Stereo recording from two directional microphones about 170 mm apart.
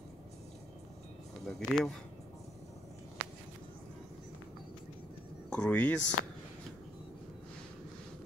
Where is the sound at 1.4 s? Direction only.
Centre (ahead or behind).